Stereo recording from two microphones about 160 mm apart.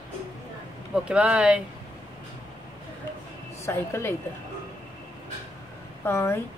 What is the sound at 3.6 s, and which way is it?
Speech, 15° left (ahead or behind).